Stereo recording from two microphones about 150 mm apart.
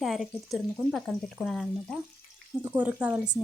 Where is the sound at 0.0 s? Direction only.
Centre (ahead or behind).